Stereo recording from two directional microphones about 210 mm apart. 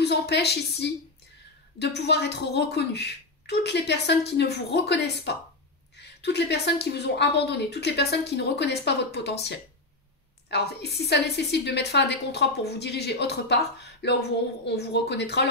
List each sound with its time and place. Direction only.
0.0 s speech: 50° left (ahead or behind)